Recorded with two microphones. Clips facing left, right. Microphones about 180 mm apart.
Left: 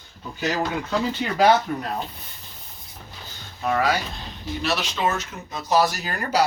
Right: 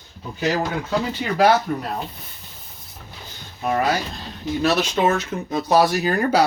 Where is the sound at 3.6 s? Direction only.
25° right (ahead or behind).